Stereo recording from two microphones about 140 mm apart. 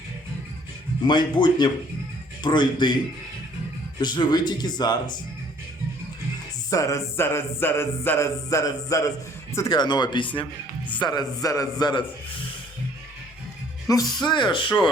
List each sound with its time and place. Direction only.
1.0 s speech: 30° left (ahead or behind)
4.0 s speech: 30° left (ahead or behind)
6.7 s music: 25° left (ahead or behind)
9.6 s speech: 30° left (ahead or behind)
11.0 s music: 30° left (ahead or behind)
13.8 s speech: 25° left (ahead or behind)